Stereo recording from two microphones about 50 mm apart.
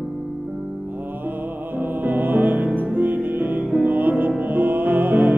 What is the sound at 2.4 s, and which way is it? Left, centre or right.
Music, right.